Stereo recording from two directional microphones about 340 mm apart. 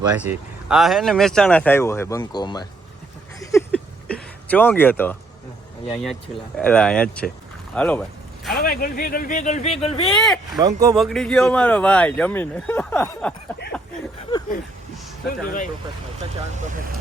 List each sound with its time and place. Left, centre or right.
0.0 s speech: centre
3.4 s a sound: centre
5.9 s speech: centre
8.5 s speech: left
10.2 s speech: centre
10.6 s speech: centre
10.9 s speech: centre
13.7 s a sound: centre